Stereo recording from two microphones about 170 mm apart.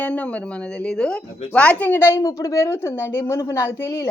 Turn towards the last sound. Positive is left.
turn(degrees=15)  # may be behind; listen again after turning